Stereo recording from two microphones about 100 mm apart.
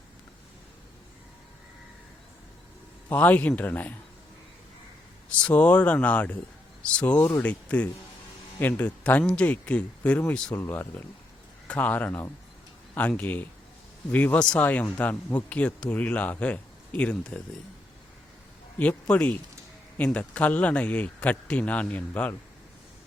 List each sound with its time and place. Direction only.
3.1 s speech: 15° left (ahead or behind)
5.4 s speech: 15° left (ahead or behind)
10.5 s speech: 25° left (ahead or behind)
18.8 s speech: 15° left (ahead or behind)